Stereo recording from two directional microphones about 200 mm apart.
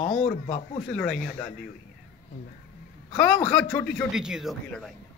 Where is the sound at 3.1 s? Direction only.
5° left (ahead or behind).